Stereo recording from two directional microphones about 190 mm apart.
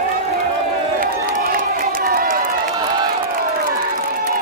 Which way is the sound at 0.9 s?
45° right (ahead or behind).